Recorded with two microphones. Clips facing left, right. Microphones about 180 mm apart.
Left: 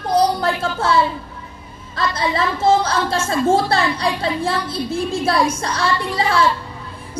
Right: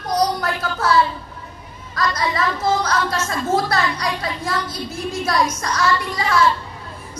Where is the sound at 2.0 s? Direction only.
30° left (ahead or behind).